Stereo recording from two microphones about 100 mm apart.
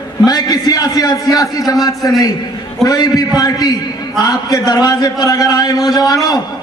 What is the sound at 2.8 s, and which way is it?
A man's voice, 40° left (ahead or behind).